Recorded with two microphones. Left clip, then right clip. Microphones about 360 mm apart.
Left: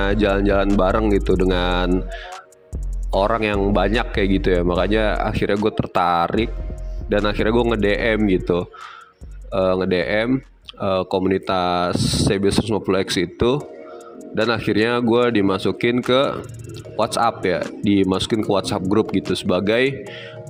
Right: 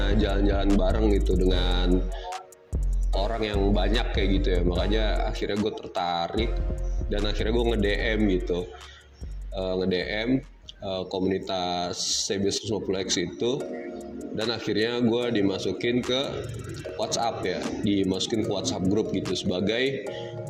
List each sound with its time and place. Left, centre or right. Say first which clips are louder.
0.0 s speech: left 8 dB; left
3.1 s speech: left 10 dB; left
9.5 s speech: left 9 dB; left